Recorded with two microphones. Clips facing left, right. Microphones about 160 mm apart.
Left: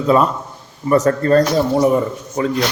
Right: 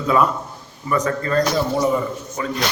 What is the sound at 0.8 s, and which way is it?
Speech, 40° left (ahead or behind).